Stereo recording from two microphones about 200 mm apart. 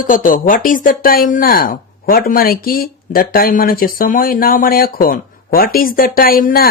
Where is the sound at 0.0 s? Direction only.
40° left (ahead or behind).